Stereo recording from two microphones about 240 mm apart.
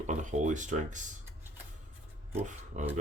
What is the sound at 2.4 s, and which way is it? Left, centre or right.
Speech, right.